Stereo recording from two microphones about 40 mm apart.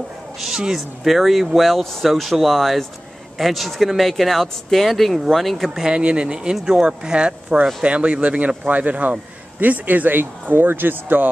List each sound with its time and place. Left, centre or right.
0.4 s speech: centre
5.9 s speech: right